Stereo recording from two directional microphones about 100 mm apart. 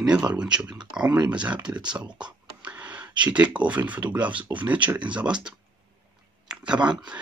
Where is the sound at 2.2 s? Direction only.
15° right (ahead or behind).